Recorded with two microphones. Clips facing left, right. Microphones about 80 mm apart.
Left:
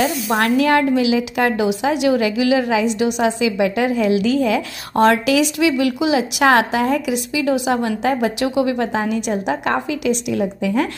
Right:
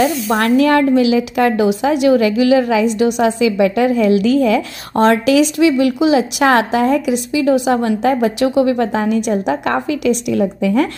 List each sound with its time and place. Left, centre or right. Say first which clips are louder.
0.6 s a woman's voice: right 5 dB; right
4.9 s speech: right 3 dB; right